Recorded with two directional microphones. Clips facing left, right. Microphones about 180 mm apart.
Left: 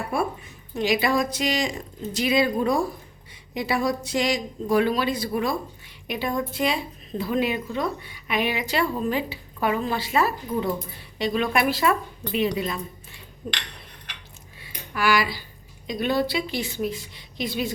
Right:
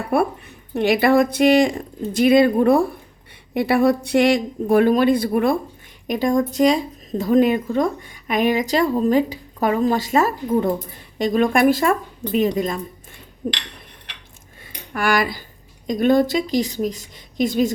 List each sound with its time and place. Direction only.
0.1 s a woman's voice: 60° right (ahead or behind)
6.1 s speech: 45° right (ahead or behind)
14.6 s a sound: 50° right (ahead or behind)
15.9 s speech: 45° right (ahead or behind)